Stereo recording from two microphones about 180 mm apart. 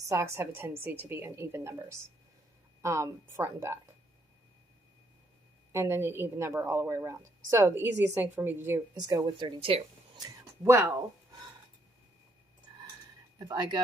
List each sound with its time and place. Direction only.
0.1 s a woman's voice: 15° right (ahead or behind)
5.7 s a woman's voice: 15° right (ahead or behind)
13.4 s speech: 25° right (ahead or behind)